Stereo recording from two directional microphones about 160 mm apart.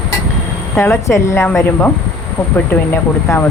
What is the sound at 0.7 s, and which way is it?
Speech, 15° left (ahead or behind).